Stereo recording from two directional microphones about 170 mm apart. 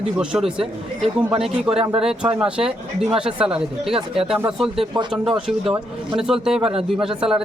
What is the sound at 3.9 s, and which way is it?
Speech, 35° right (ahead or behind).